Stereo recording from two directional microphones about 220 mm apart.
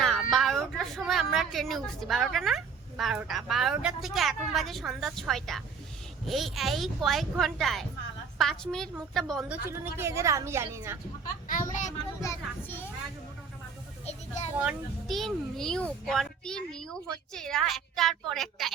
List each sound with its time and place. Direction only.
0.0 s a sound: centre (ahead or behind)
3.0 s a child's voice: centre (ahead or behind)
9.6 s a woman's voice: 10° right (ahead or behind)
11.4 s a child's voice: 35° left (ahead or behind)
12.2 s speech: 10° left (ahead or behind)
14.1 s a child's voice: 30° left (ahead or behind)
14.5 s a child's voice: 5° right (ahead or behind)